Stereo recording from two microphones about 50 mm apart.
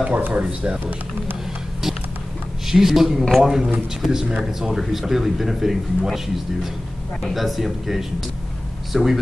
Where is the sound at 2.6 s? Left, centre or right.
Centre.